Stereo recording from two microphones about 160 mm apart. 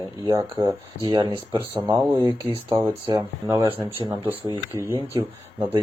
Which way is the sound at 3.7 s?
30° right (ahead or behind).